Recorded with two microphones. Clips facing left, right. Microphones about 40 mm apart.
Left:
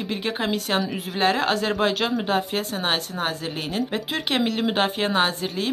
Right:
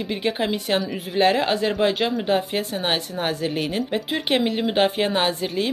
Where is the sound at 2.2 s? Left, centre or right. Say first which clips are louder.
Right 2 dB; right.